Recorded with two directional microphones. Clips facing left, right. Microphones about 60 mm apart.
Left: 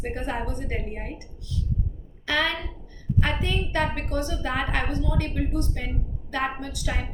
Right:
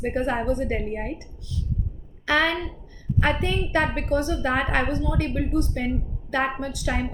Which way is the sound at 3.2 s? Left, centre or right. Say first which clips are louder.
Right 4 dB; right.